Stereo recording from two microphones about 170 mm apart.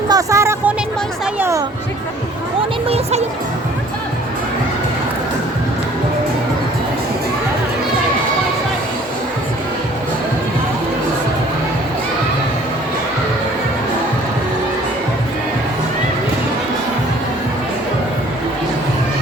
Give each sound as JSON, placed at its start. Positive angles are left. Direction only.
{"t": 0.1, "sound": "speech", "side_deg": -20}
{"t": 2.9, "sound": "speech", "side_deg": -40}